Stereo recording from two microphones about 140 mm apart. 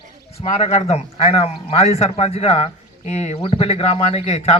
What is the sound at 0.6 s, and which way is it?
A man's voice, 50° left (ahead or behind).